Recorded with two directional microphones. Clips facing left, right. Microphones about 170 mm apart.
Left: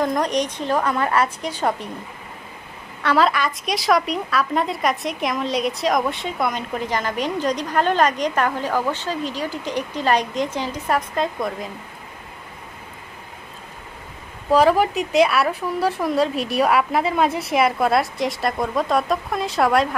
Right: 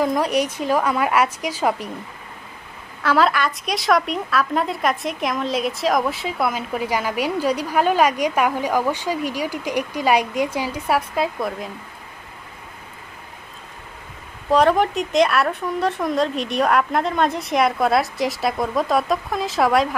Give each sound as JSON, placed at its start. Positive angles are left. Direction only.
{"t": 0.0, "sound": "a woman's voice", "side_deg": -5}
{"t": 3.0, "sound": "a woman's voice", "side_deg": 0}
{"t": 14.5, "sound": "a woman's voice", "side_deg": 5}